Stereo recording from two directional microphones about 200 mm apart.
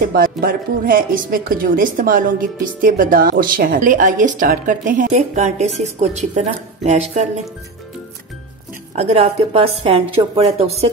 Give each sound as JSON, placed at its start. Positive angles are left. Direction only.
{"t": 0.1, "sound": "speech", "side_deg": -45}
{"t": 8.9, "sound": "a woman's voice", "side_deg": -30}